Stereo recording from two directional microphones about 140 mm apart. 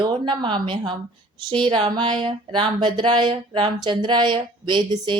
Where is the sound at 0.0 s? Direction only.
35° right (ahead or behind).